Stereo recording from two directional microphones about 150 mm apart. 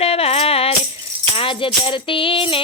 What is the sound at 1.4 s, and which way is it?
Music, 35° left (ahead or behind).